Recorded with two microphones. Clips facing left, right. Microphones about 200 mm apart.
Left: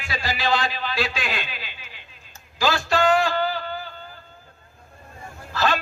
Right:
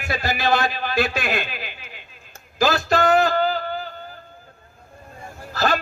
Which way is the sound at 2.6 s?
40° right (ahead or behind).